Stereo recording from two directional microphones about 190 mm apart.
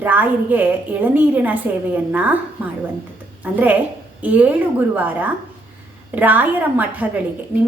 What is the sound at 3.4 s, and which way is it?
A woman's voice, 10° right (ahead or behind).